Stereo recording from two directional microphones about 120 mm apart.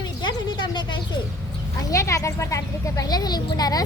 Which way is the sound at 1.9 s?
25° left (ahead or behind).